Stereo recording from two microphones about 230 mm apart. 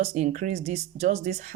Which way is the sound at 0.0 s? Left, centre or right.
Right.